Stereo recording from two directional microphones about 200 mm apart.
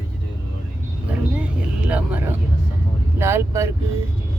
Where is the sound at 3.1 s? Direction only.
10° right (ahead or behind).